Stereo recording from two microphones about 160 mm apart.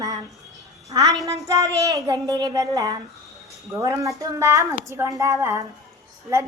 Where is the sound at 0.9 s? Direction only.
20° right (ahead or behind).